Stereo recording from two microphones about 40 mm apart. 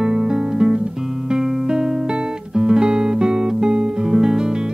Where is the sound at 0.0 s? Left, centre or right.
Centre.